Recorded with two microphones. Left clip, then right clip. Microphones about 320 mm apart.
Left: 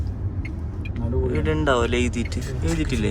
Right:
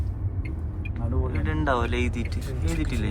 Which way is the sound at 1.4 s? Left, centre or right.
Centre.